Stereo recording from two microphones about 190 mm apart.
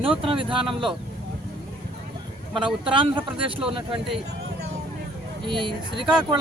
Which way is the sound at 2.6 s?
25° right (ahead or behind).